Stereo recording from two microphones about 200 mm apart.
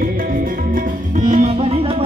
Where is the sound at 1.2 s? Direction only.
35° right (ahead or behind).